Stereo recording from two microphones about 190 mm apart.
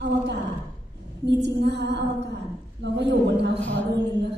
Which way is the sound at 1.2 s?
65° right (ahead or behind).